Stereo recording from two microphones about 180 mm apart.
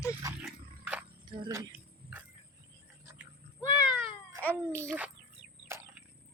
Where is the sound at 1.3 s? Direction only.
25° right (ahead or behind).